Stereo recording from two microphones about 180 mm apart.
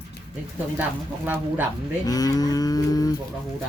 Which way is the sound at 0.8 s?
10° right (ahead or behind).